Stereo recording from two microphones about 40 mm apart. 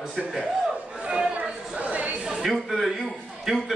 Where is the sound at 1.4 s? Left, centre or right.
Right.